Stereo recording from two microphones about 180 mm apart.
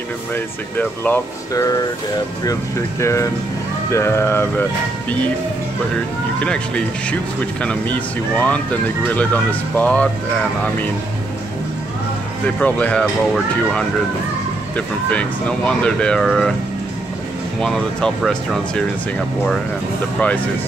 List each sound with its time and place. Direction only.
0.3 s speech: 10° left (ahead or behind)
3.0 s speech: 15° left (ahead or behind)
6.4 s speech: 5° left (ahead or behind)
12.5 s speech: 5° left (ahead or behind)
14.8 s speech: 5° left (ahead or behind)
17.6 s speech: 5° left (ahead or behind)
20.2 s speech: 10° left (ahead or behind)